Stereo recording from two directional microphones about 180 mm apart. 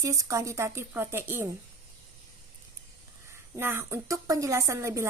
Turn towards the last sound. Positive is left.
turn(degrees=-15)  # may be behind; listen again after turning